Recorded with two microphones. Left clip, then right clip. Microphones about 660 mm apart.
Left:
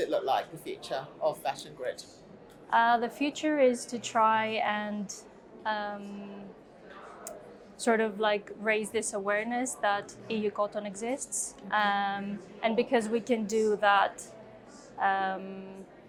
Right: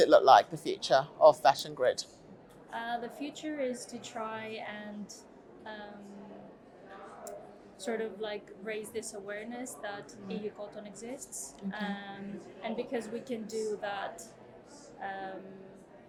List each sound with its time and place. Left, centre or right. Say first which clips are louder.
0.0 s speech: right 8 dB; right
2.6 s a woman's voice: left 12 dB; left
7.8 s a woman's voice: left 9 dB; left